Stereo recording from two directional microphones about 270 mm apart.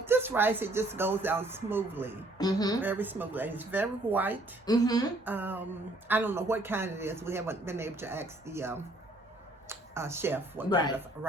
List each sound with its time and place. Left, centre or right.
0.0 s a man's voice: centre
2.4 s speech: centre
2.8 s a man's voice: centre
4.6 s speech: centre
5.2 s a man's voice: centre
10.7 s speech: centre